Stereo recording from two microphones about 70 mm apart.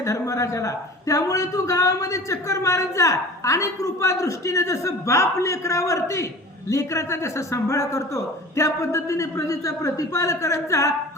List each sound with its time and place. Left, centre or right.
0.0 s a man's voice: left